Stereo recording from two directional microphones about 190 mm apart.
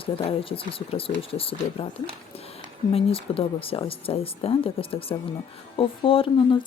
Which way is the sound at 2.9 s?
30° left (ahead or behind).